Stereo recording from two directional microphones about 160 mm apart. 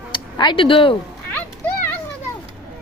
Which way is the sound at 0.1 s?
30° left (ahead or behind).